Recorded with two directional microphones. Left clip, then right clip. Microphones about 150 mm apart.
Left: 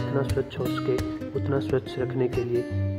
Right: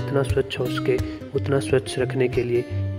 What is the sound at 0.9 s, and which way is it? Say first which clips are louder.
Speech: right 4 dB; 15° right (ahead or behind).